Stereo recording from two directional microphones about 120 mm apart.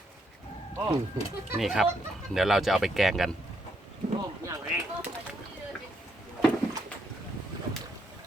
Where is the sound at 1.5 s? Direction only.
Centre (ahead or behind).